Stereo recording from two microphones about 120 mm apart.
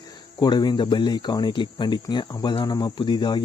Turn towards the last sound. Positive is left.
turn(degrees=40)  # may be behind; listen again after turning